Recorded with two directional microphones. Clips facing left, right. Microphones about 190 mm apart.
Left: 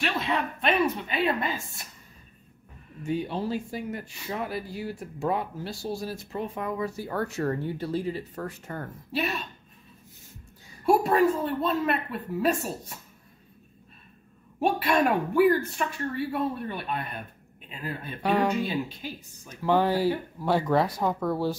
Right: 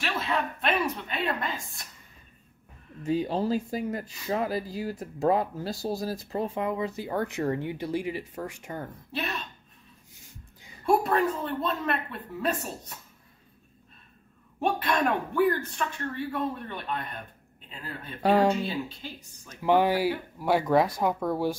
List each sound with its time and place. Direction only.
0.0 s a woman's voice: centre (ahead or behind)
3.3 s speech: 40° right (ahead or behind); by 8.9 s 15° right (ahead or behind)
9.1 s speech: 5° left (ahead or behind)
10.9 s a woman's voice: centre (ahead or behind)
14.6 s speech: 5° left (ahead or behind)
18.2 s speech: 30° right (ahead or behind)
18.6 s speech: 10° left (ahead or behind)
19.6 s speech: 15° right (ahead or behind)